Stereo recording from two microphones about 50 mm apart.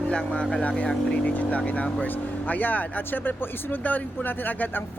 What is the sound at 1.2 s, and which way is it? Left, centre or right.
Speech, left.